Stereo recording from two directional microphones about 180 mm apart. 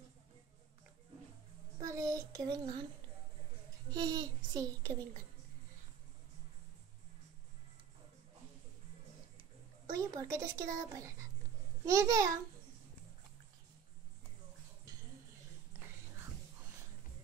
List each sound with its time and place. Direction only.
1.8 s child singing: 20° right (ahead or behind)
3.9 s a child's voice: 20° right (ahead or behind)
9.9 s speech: 20° right (ahead or behind)